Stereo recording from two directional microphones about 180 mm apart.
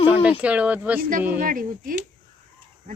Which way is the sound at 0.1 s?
10° right (ahead or behind).